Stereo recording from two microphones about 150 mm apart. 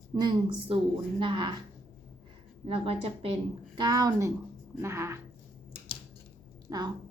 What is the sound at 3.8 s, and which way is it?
A woman's voice, 25° right (ahead or behind).